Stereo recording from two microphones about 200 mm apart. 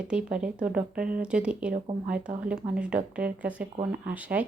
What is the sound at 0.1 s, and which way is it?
Speech, 5° right (ahead or behind).